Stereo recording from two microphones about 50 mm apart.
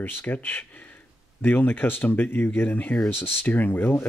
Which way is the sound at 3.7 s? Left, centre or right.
Left.